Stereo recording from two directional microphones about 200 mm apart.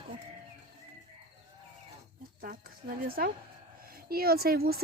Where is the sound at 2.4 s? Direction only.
45° right (ahead or behind).